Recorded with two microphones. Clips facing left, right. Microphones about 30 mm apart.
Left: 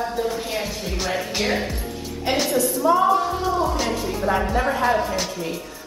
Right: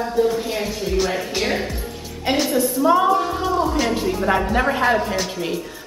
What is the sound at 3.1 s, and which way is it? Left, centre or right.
Music, centre.